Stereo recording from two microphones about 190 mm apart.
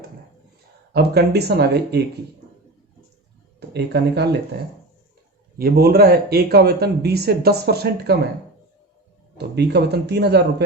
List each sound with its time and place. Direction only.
0.9 s speech: 60° right (ahead or behind)
3.7 s speech: 60° right (ahead or behind)
5.5 s speech: 55° right (ahead or behind)
9.4 s speech: 60° right (ahead or behind)